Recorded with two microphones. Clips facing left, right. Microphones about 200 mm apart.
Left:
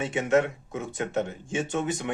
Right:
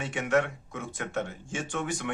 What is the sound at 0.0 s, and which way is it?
Speech, 20° left (ahead or behind).